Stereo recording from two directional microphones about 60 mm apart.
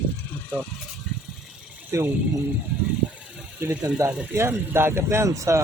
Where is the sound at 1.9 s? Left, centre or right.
Right.